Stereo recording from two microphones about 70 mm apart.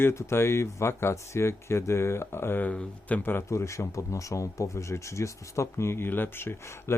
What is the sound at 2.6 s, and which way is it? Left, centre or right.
Speech, left.